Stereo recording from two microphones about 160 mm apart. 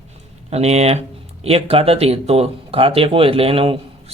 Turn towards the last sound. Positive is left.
turn(degrees=-35)  # may be behind; listen again after turning